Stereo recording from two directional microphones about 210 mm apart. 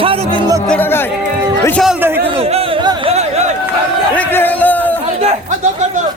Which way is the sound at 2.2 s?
25° right (ahead or behind).